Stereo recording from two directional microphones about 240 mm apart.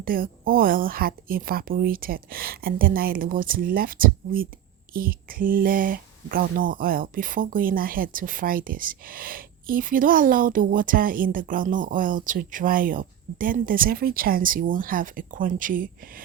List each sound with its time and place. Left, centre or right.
0.0 s speech: right